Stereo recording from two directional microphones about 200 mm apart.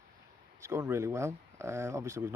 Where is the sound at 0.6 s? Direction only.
15° right (ahead or behind).